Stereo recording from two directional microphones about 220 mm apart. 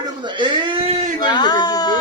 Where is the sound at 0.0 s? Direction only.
20° right (ahead or behind).